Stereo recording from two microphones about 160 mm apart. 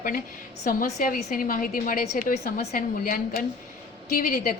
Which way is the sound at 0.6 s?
55° left (ahead or behind).